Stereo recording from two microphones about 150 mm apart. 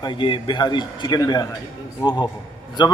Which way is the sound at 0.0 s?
30° left (ahead or behind).